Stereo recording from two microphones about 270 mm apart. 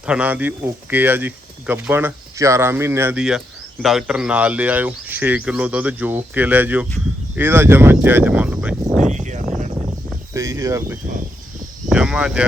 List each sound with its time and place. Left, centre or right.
0.0 s speech: centre
9.1 s a sound: right
10.3 s speech: centre
11.9 s cricket: centre